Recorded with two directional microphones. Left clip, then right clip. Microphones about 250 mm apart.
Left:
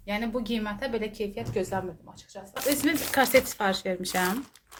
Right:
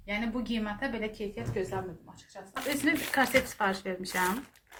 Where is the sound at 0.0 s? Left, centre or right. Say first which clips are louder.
Left 3 dB; left.